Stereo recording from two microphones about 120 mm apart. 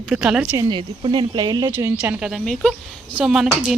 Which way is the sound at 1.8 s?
25° right (ahead or behind).